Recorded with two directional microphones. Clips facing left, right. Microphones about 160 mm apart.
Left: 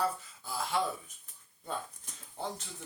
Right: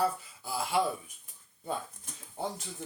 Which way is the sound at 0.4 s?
10° right (ahead or behind).